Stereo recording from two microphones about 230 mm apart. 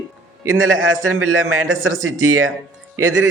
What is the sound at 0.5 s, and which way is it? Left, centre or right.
A man's voice, right.